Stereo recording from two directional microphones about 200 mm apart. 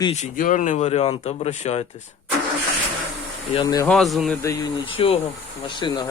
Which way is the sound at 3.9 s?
Centre (ahead or behind).